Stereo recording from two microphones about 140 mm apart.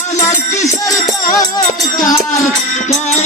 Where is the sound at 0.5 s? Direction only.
55° left (ahead or behind).